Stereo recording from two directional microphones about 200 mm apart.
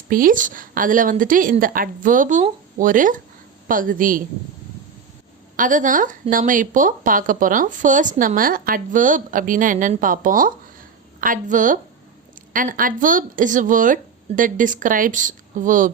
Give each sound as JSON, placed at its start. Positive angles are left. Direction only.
{"t": 0.1, "sound": "a woman's voice", "side_deg": -45}
{"t": 5.5, "sound": "speech", "side_deg": -40}